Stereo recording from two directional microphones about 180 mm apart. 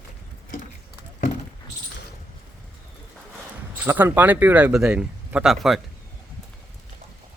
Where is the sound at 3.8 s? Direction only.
10° right (ahead or behind).